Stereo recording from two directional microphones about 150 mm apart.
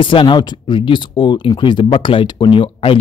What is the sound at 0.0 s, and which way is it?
Speech, 35° left (ahead or behind).